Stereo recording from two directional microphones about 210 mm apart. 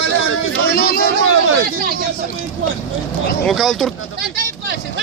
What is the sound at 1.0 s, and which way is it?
Speech, 90° right.